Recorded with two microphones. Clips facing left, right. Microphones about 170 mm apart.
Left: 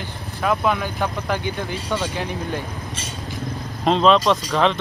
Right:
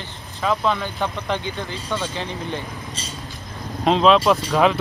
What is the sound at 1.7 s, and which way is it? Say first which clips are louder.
Speech: left 2 dB; 15° left (ahead or behind).